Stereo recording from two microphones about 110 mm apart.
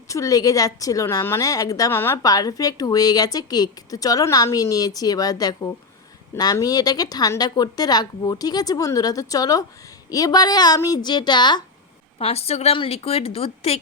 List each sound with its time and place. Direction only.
0.1 s a woman's voice: 30° left (ahead or behind)
1.9 s a woman's voice: 20° left (ahead or behind)
2.2 s a woman's voice: 35° left (ahead or behind)
12.2 s a woman's voice: 65° left (ahead or behind)